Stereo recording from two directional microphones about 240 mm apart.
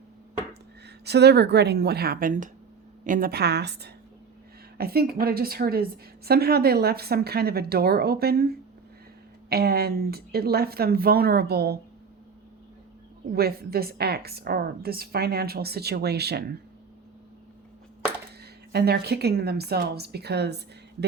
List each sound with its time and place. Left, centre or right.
1.0 s a woman's voice: right
13.3 s a woman's voice: right
18.7 s a woman's voice: right